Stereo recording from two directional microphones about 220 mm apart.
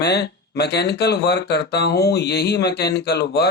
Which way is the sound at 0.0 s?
50° left (ahead or behind).